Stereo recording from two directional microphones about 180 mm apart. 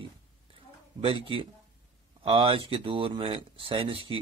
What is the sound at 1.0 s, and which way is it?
Speech, 30° right (ahead or behind).